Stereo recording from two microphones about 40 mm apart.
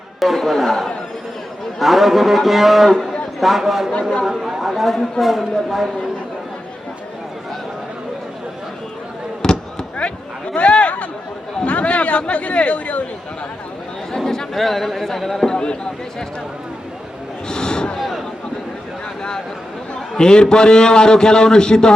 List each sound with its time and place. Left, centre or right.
0.2 s a man's voice: centre
4.4 s chatter: centre
4.7 s a man's voice: centre
9.4 s fireworks: left
10.5 s a sound: left
11.6 s speech: left
14.3 s a man's voice: centre
15.4 s a man's voice: left
17.5 s a sound: centre
20.1 s a man's voice: centre